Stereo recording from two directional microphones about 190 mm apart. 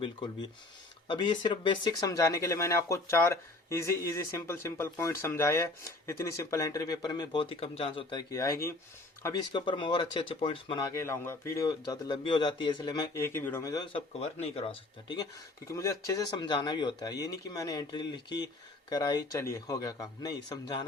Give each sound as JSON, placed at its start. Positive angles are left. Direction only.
{"t": 1.0, "sound": "a man's voice", "side_deg": 25}
{"t": 10.9, "sound": "a man's voice", "side_deg": 15}